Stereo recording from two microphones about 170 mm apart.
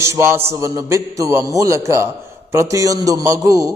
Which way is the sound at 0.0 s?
15° right (ahead or behind).